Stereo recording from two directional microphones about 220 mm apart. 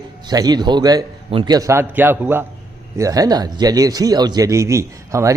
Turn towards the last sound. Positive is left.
turn(degrees=-15)  # may be behind; listen again after turning